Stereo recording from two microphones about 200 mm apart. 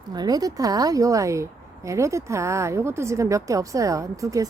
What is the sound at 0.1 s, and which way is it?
A woman's voice, 20° right (ahead or behind).